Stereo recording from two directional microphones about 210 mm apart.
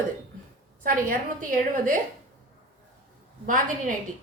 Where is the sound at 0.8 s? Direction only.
40° right (ahead or behind).